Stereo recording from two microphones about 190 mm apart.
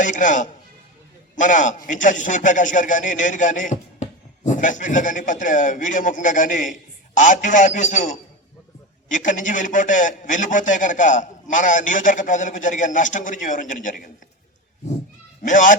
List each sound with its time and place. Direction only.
0.0 s a man's voice: 40° left (ahead or behind)
15.4 s a man's voice: 45° left (ahead or behind)